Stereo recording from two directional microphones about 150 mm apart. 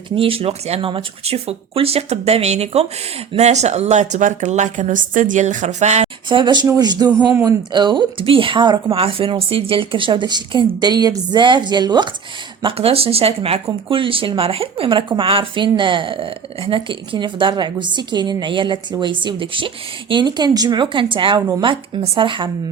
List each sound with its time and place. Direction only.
0.2 s a woman's voice: 40° right (ahead or behind)
6.2 s speech: 30° right (ahead or behind)
12.6 s speech: 40° right (ahead or behind)